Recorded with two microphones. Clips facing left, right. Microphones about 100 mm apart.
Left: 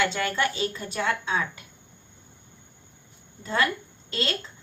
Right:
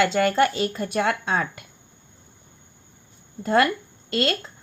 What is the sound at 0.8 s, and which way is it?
Speech, 65° right (ahead or behind).